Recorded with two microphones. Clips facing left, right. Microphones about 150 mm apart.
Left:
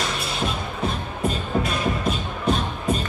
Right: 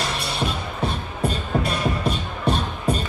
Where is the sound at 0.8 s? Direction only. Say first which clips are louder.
Even; 30° right (ahead or behind).